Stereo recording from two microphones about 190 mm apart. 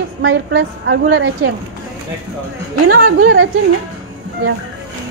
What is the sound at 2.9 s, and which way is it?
Speech, 90° right.